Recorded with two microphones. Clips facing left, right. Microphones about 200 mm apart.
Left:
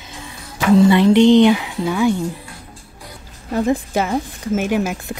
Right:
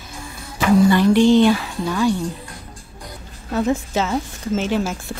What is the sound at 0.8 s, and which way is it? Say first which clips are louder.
Speech: left 3 dB; 20° left (ahead or behind).